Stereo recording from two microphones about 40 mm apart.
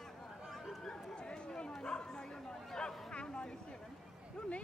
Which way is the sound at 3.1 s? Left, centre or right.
Left.